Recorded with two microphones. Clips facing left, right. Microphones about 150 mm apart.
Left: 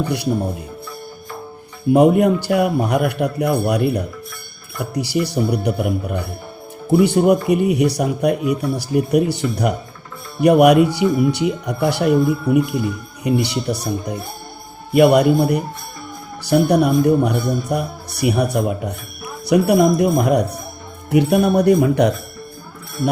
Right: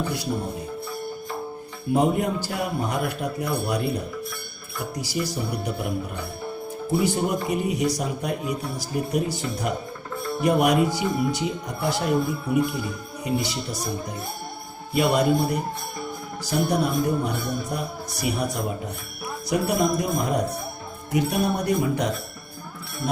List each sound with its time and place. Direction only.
1.9 s a man's voice: 65° left (ahead or behind)
6.9 s a man's voice: 65° left (ahead or behind)
14.9 s a man's voice: 65° left (ahead or behind)